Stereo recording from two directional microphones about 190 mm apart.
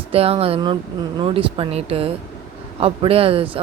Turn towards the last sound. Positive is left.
turn(degrees=-30)  # may be behind; listen again after turning